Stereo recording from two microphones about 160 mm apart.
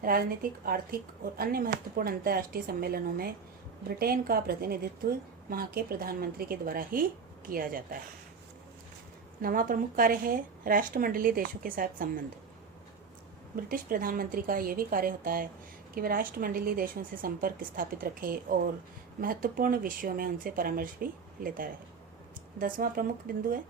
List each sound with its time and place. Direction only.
0.6 s a woman's voice: 65° right (ahead or behind)
9.4 s a woman's voice: 60° right (ahead or behind)
13.6 s a woman's voice: 65° right (ahead or behind)